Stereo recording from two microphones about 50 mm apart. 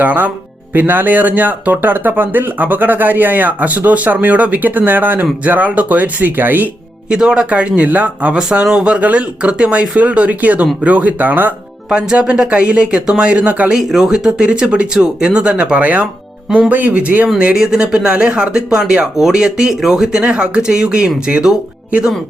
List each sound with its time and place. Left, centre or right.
0.0 s speech: right
7.1 s speech: centre
8.4 s speech: centre; by 11.5 s right
11.9 s speech: centre
13.7 s speech: centre; by 17.2 s right
17.5 s speech: centre
20.1 s speech: right